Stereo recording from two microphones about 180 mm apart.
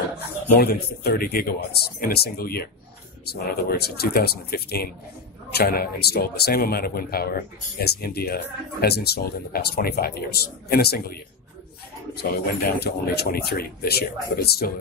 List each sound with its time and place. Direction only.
0.6 s speech: 60° left (ahead or behind)
12.2 s speech: 60° left (ahead or behind)